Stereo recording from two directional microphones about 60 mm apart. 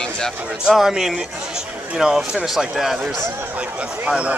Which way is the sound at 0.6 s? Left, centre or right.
Centre.